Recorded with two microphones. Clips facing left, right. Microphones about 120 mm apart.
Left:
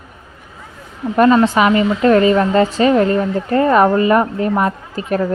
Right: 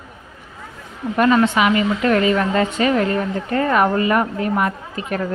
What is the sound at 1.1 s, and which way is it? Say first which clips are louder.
A woman's voice: left 4 dB; 35° left (ahead or behind).